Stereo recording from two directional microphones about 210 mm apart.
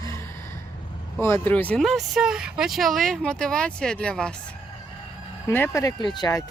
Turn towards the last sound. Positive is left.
turn(degrees=20)  # may be behind; listen again after turning